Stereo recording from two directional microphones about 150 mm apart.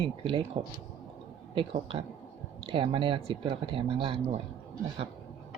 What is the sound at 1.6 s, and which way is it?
Speech, 40° right (ahead or behind).